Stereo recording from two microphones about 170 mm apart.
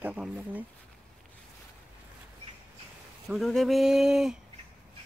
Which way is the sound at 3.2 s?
Centre (ahead or behind).